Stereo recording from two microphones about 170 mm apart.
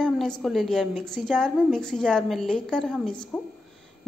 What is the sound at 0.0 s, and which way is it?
A woman's voice, centre (ahead or behind).